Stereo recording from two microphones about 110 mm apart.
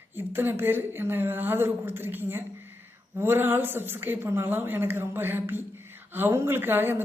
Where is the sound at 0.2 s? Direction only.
20° right (ahead or behind).